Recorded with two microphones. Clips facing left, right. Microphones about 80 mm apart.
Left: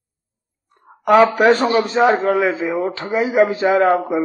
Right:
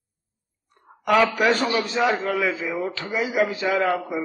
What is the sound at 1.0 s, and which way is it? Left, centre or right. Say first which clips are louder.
A man's voice: left 7 dB; left.